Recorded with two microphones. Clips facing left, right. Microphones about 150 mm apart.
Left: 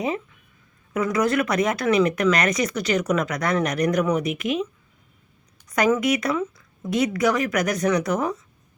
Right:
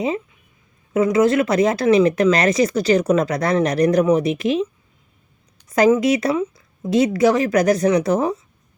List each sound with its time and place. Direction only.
0.9 s speech: 25° right (ahead or behind)